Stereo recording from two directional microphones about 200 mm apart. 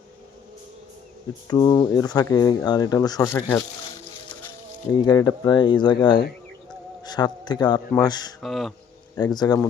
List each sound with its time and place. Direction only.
1.5 s speech: 15° left (ahead or behind)
4.9 s speech: 20° left (ahead or behind)
8.4 s speech: centre (ahead or behind)
9.1 s speech: 20° left (ahead or behind)